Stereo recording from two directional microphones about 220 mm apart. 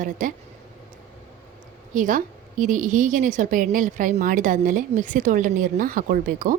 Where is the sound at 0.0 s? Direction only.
35° right (ahead or behind).